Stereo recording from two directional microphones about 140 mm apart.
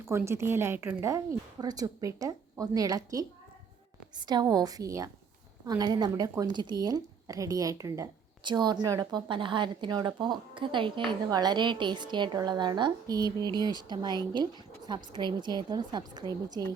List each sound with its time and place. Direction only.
0.1 s a woman's voice: 20° right (ahead or behind)
4.3 s a woman's voice: 30° right (ahead or behind)